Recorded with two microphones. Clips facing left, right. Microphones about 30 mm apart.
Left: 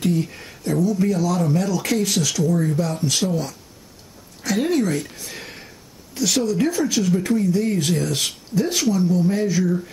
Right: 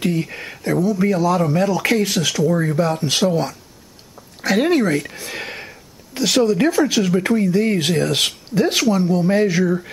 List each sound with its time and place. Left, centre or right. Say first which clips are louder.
0.0 s speech: right 1 dB; right
2.5 s speech: right 2 dB; right
2.8 s speech: right 5 dB; right
5.4 s a sound: right 7 dB; right
6.1 s speech: right 4 dB; right